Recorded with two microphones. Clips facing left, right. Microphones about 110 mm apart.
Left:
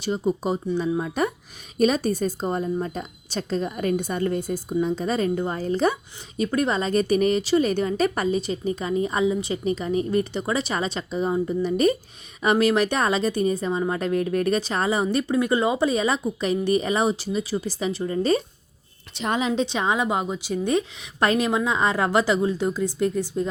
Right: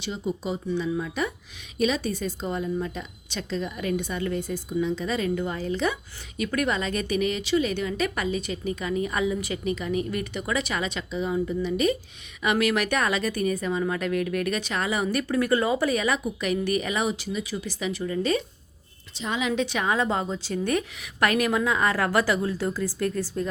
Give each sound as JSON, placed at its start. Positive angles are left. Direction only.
{"t": 0.0, "sound": "a woman's voice", "side_deg": 45}
{"t": 19.1, "sound": "a woman's voice", "side_deg": 65}
{"t": 19.4, "sound": "a woman's voice", "side_deg": 30}